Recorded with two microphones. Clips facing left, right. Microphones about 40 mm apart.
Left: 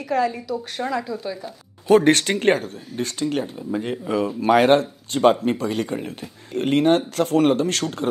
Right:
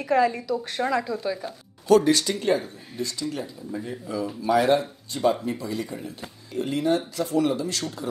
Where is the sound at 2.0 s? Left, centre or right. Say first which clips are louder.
Left 5 dB; left.